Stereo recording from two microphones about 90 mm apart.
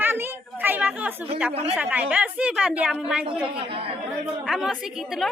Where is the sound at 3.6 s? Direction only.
90° right.